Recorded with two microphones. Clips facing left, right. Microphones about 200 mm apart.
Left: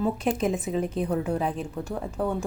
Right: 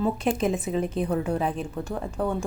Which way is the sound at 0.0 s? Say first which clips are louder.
Right 1 dB; centre (ahead or behind).